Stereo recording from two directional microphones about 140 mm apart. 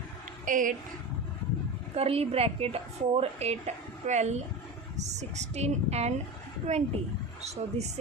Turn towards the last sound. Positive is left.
turn(degrees=-50)  # may be behind; listen again after turning